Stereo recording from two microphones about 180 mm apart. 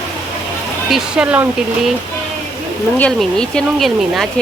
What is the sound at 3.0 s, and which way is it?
Speech, 5° left (ahead or behind).